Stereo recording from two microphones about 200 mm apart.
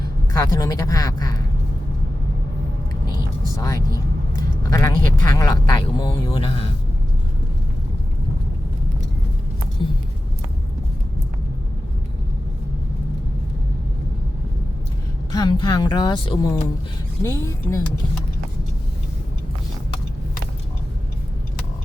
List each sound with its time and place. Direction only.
0.3 s speech: 15° left (ahead or behind)
3.6 s speech: 15° left (ahead or behind)
15.3 s speech: 20° left (ahead or behind)
17.2 s speech: 15° left (ahead or behind)